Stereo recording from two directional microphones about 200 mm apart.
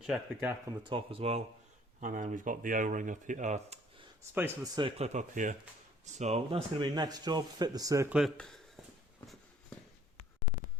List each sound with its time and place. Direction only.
0.0 s speech: 5° right (ahead or behind)
0.9 s speech: 25° right (ahead or behind)
2.0 s speech: 40° right (ahead or behind)
4.4 s speech: 15° right (ahead or behind)
8.1 s speech: centre (ahead or behind)